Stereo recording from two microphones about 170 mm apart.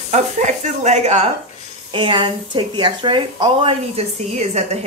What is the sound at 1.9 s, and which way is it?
Speech, 30° right (ahead or behind).